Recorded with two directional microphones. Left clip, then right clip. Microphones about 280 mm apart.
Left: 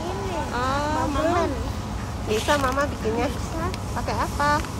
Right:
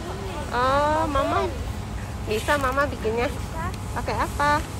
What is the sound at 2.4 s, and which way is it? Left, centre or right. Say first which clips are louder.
Speech: right 1 dB; centre.